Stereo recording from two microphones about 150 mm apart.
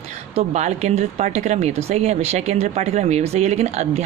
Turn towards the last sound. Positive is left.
turn(degrees=-45)  # may be behind; listen again after turning